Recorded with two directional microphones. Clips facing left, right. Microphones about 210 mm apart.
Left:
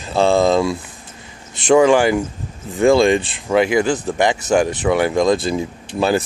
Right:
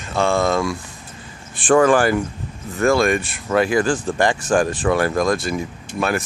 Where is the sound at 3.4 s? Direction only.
15° left (ahead or behind).